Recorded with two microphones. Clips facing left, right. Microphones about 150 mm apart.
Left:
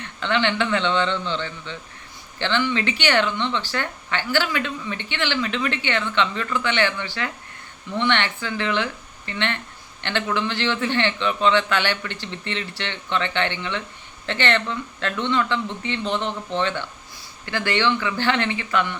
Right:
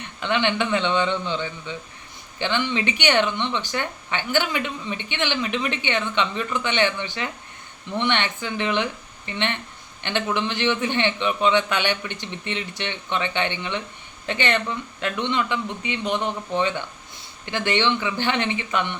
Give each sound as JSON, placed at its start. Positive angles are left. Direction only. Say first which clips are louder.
{"t": 0.0, "sound": "speech", "louder": "left 1 dB", "side_deg": -15}